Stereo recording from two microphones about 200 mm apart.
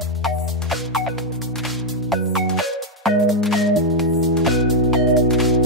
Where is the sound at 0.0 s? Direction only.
Centre (ahead or behind).